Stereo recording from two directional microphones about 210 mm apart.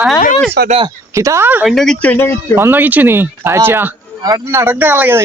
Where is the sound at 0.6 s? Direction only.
50° right (ahead or behind).